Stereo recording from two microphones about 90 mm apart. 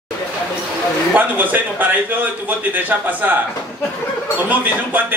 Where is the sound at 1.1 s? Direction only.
20° right (ahead or behind).